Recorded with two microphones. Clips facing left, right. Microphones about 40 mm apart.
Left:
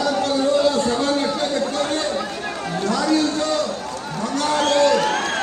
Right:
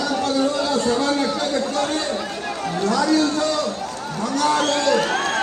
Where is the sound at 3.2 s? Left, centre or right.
Right.